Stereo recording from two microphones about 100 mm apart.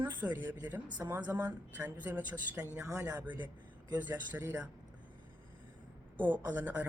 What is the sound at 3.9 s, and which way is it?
Speech, 15° right (ahead or behind).